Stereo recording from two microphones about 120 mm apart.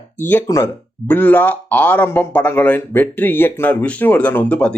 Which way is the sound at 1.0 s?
15° left (ahead or behind).